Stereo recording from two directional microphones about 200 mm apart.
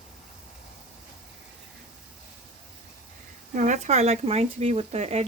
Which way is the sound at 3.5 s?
35° right (ahead or behind).